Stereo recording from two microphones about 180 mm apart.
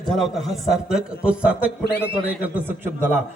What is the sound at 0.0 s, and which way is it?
A man's voice, centre (ahead or behind).